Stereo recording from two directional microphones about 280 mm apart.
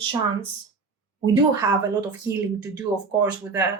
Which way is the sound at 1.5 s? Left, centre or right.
Centre.